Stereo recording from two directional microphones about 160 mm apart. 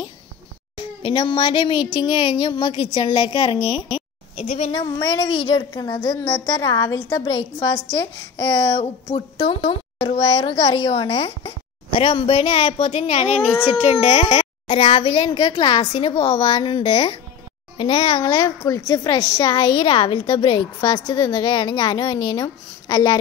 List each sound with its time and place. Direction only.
1.0 s a woman's voice: 30° left (ahead or behind)
4.5 s a woman's voice: 45° left (ahead or behind)
5.7 s a woman's voice: 25° left (ahead or behind)
18.2 s a woman's voice: 25° left (ahead or behind)